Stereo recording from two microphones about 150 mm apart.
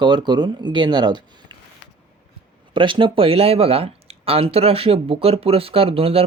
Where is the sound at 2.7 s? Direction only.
35° right (ahead or behind).